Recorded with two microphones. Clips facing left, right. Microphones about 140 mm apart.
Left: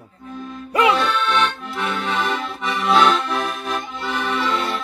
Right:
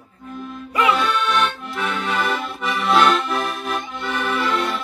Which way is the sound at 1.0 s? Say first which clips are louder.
Even; 5° right (ahead or behind).